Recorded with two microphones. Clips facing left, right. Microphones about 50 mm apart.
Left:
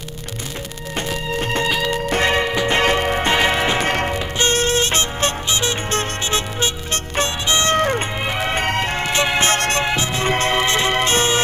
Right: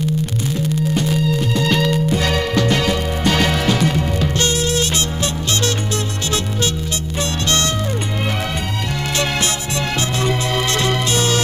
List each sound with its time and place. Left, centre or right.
0.9 s music: left
2.2 s music: left
3.3 s music: left
3.8 s music: left
7.7 s music: left
9.1 s music: left
9.4 s music: left
10.6 s music: left